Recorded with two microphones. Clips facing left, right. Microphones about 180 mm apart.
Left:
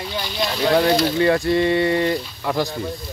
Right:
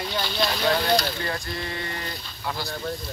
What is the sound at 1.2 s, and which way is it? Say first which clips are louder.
Speech: left 14 dB; 90° left.